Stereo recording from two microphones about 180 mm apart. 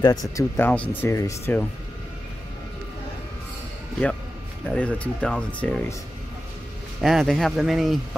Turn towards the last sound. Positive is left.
turn(degrees=0)  # may be behind; listen again after turning